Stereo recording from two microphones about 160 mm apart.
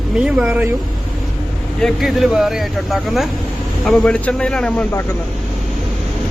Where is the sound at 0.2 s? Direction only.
5° right (ahead or behind).